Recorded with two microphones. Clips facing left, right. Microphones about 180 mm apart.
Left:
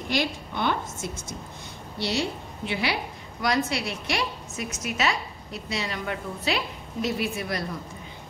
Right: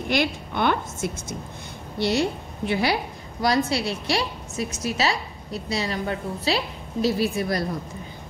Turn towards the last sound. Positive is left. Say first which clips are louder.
# right 5 dB
turn(degrees=-35)  # may be behind; listen again after turning